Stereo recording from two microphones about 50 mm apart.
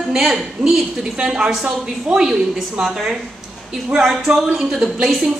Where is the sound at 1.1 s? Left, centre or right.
Centre.